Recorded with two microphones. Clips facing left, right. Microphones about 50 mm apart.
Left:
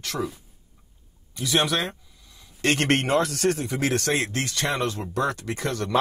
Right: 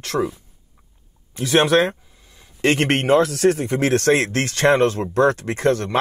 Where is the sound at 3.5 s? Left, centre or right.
Right.